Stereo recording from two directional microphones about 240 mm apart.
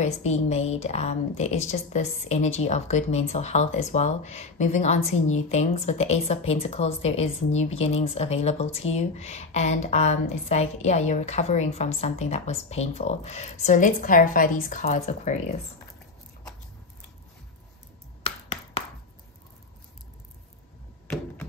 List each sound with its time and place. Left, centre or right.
0.0 s a woman's voice: left
18.2 s finger snapping: left